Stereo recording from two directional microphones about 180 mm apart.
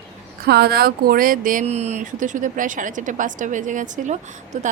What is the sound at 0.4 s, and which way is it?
A woman's voice, 60° right (ahead or behind).